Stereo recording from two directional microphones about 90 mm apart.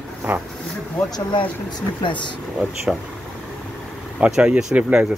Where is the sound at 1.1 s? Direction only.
55° left (ahead or behind).